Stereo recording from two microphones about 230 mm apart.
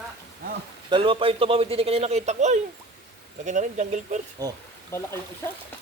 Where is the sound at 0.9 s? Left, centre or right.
Right.